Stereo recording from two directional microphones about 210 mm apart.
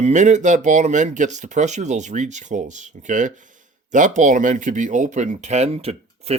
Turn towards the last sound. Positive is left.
turn(degrees=-30)  # may be behind; listen again after turning